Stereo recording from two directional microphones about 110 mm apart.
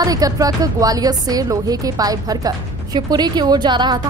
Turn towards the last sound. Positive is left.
turn(degrees=-45)  # may be behind; listen again after turning